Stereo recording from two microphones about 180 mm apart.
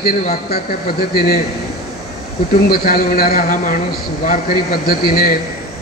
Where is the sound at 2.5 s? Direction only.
55° left (ahead or behind).